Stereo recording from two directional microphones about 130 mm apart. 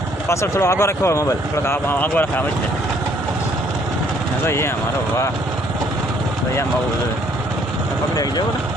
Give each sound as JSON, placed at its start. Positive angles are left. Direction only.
{"t": 0.3, "sound": "speech", "side_deg": 20}
{"t": 4.4, "sound": "speech", "side_deg": 20}
{"t": 8.1, "sound": "speech", "side_deg": 30}